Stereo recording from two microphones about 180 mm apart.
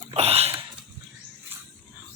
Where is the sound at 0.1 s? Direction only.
35° right (ahead or behind).